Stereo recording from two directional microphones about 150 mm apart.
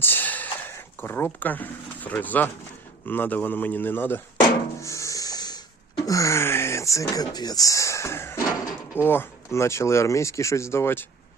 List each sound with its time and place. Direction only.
0.0 s a sound: 10° left (ahead or behind)
3.1 s a man's voice: 10° left (ahead or behind)
4.4 s drum: 25° left (ahead or behind)
6.1 s speech: 20° left (ahead or behind)